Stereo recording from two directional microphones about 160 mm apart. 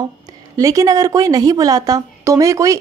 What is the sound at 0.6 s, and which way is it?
A woman's voice, 20° right (ahead or behind).